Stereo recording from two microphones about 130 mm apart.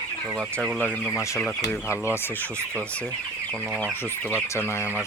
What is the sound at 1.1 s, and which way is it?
Speech, 20° left (ahead or behind).